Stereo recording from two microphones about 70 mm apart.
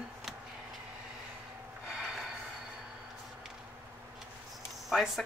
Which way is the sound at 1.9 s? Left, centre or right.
Centre.